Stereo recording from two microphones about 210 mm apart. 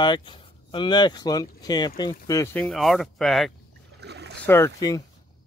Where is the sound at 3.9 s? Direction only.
55° right (ahead or behind).